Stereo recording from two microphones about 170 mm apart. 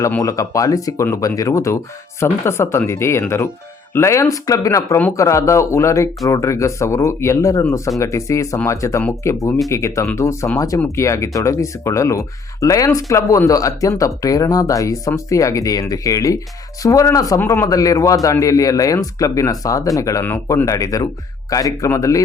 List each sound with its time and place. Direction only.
0.0 s a man's voice: 20° left (ahead or behind)